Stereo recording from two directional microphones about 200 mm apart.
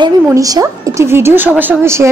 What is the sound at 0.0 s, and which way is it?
A woman's voice, 15° right (ahead or behind).